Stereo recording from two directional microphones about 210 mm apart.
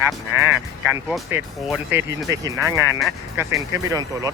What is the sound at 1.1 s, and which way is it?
Speech, centre (ahead or behind).